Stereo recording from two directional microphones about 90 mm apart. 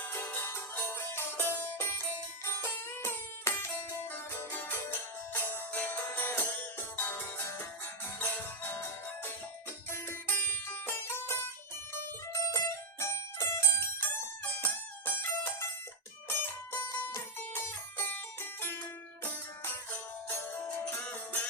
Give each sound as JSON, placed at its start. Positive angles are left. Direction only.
{"t": 0.0, "sound": "music", "side_deg": 20}
{"t": 9.9, "sound": "music", "side_deg": 25}
{"t": 16.4, "sound": "music", "side_deg": 25}